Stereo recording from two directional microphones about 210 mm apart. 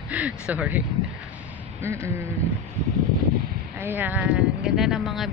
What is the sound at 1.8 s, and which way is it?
Speech, 10° right (ahead or behind).